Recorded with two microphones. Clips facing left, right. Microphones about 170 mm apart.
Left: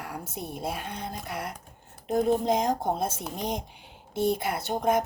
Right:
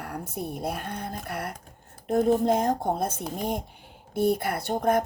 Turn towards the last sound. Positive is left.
turn(degrees=-55)  # may be behind; listen again after turning